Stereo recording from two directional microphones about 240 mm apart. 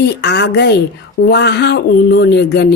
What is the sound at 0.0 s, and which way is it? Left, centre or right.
Speech, left.